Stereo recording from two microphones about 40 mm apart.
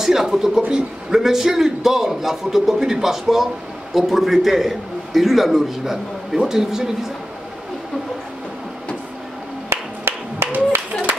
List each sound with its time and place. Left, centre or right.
0.0 s speech: centre
0.6 s speech: right
1.1 s a man's voice: centre
9.7 s music: right